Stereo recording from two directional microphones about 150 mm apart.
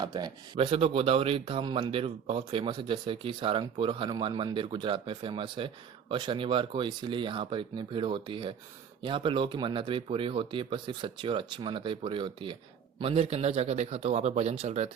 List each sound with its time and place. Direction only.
0.0 s speech: 30° right (ahead or behind); by 14.8 s 45° right (ahead or behind)